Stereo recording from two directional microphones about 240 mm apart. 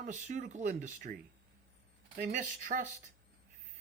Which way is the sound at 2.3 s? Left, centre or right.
Right.